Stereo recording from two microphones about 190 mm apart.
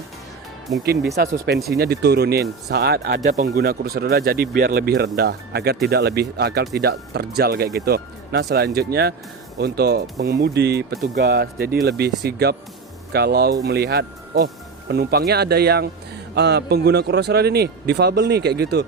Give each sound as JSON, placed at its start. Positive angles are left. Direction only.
{"t": 0.9, "sound": "a man's voice", "side_deg": -55}
{"t": 3.2, "sound": "speech", "side_deg": -40}
{"t": 3.5, "sound": "a man's voice", "side_deg": -55}